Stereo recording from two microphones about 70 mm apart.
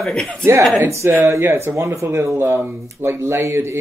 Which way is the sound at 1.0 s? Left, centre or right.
Right.